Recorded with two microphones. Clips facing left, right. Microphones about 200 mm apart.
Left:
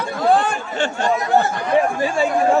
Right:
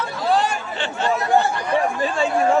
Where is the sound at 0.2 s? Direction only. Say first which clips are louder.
Left 3 dB; 55° left (ahead or behind).